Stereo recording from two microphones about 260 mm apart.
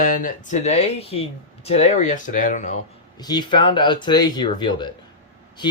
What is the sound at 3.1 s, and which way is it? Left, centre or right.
Speech, centre.